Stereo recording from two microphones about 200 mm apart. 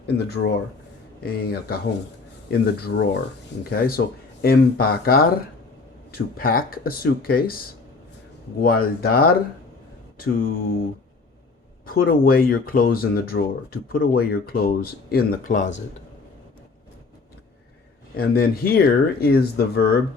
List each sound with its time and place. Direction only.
0.2 s speech: 55° left (ahead or behind)
8.6 s speech: 50° left (ahead or behind)
11.9 s speech: 50° left (ahead or behind)
18.2 s speech: 50° left (ahead or behind)